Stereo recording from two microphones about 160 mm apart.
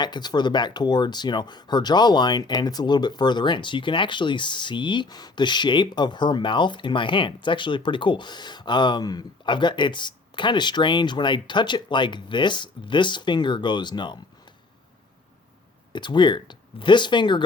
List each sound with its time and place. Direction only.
0.0 s speech: 25° left (ahead or behind)
15.9 s speech: 30° left (ahead or behind)